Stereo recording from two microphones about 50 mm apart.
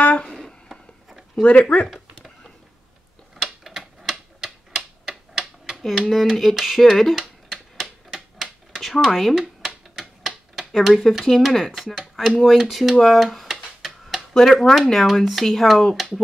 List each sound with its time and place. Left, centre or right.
0.0 s a sound: left
1.3 s speech: left
3.4 s typewriter: centre
6.0 s speech: centre
7.5 s typewriter: centre
8.8 s speech: centre
9.1 s speech: centre
12.0 s speech: centre
13.0 s a sound: centre
14.5 s speech: centre